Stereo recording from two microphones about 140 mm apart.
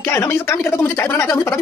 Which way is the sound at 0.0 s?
20° left (ahead or behind).